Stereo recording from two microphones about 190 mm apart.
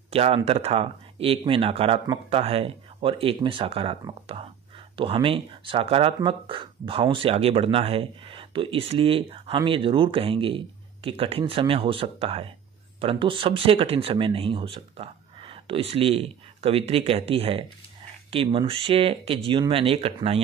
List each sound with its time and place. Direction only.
0.1 s speech: 30° right (ahead or behind)